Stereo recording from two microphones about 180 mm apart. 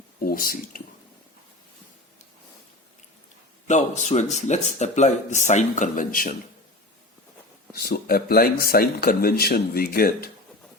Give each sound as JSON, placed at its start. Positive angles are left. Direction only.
{"t": 0.2, "sound": "speech", "side_deg": 50}
{"t": 3.7, "sound": "speech", "side_deg": 40}
{"t": 7.7, "sound": "speech", "side_deg": 60}